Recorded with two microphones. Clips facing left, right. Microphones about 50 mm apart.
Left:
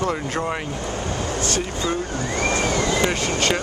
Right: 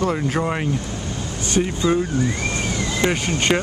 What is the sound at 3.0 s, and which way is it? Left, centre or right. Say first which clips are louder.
Speech: right 1 dB; centre.